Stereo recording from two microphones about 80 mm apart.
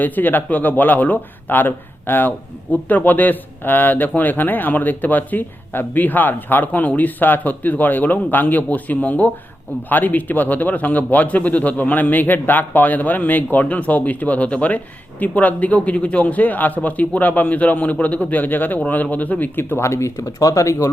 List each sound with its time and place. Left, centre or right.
0.0 s speech: left